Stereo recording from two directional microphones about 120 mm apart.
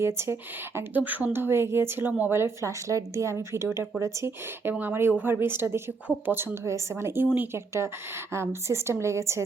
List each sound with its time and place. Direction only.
0.0 s speech: 20° right (ahead or behind)